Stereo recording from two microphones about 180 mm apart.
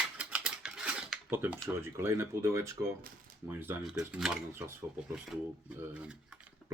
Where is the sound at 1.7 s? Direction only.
15° right (ahead or behind).